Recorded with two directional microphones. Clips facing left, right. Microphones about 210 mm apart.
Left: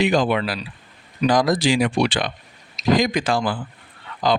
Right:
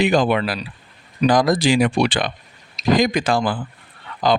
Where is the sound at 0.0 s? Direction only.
55° right (ahead or behind).